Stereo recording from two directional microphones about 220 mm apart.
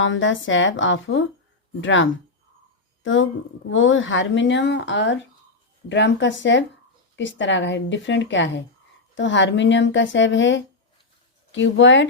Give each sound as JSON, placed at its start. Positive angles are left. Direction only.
{"t": 0.0, "sound": "speech", "side_deg": 60}